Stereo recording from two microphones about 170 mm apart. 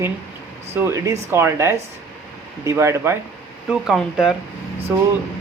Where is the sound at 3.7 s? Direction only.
5° right (ahead or behind).